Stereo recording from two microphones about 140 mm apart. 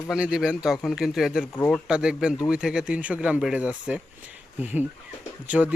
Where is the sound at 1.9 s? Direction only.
5° right (ahead or behind).